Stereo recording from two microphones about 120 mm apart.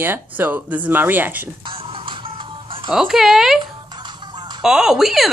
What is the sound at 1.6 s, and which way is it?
Music, 45° right (ahead or behind).